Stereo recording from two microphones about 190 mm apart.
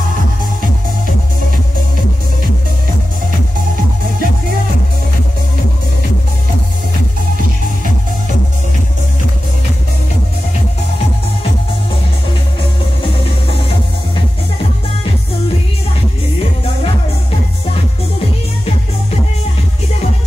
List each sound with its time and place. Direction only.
4.0 s music: 50° right (ahead or behind)